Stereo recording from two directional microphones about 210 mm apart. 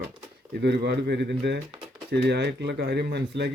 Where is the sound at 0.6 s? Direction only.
50° right (ahead or behind).